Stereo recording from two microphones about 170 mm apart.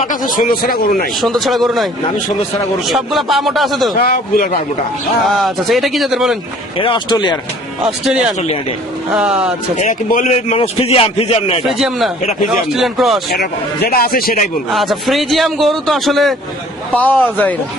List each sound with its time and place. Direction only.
0.3 s a man's voice: 55° left (ahead or behind)
1.2 s a man's voice: centre (ahead or behind)
4.0 s a man's voice: 60° left (ahead or behind)
5.2 s a man's voice: centre (ahead or behind)
6.7 s speech: 30° left (ahead or behind)
7.8 s a man's voice: 5° right (ahead or behind)
9.7 s a man's voice: 50° left (ahead or behind)
10.3 s a man's voice: 35° left (ahead or behind)
11.6 s a man's voice: centre (ahead or behind)
13.3 s a man's voice: 65° left (ahead or behind)
14.7 s a man's voice: centre (ahead or behind)